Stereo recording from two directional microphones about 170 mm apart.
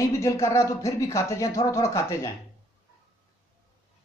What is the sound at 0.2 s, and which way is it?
Speech, 15° left (ahead or behind).